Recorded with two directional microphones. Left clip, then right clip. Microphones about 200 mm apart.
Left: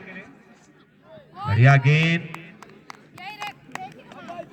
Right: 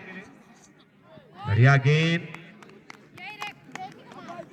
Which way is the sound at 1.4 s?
30° left (ahead or behind).